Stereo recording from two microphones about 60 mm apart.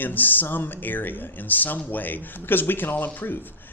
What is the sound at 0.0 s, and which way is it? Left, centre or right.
Speech, left.